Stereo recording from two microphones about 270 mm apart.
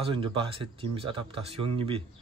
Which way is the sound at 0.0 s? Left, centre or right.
Centre.